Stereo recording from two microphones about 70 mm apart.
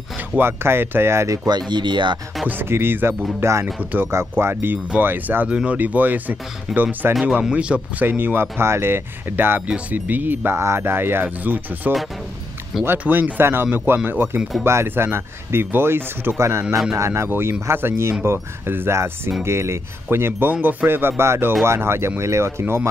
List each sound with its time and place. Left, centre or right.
0.4 s speech: right
1.7 s speech: right
2.4 s speech: right
3.3 s speech: right
5.5 s speech: centre
5.8 s speech: right
8.1 s speech: right
9.7 s speech: right
13.0 s speech: right